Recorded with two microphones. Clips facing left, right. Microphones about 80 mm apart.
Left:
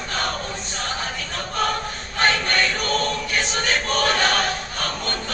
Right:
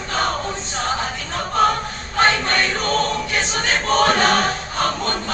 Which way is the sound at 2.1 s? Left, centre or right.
Right.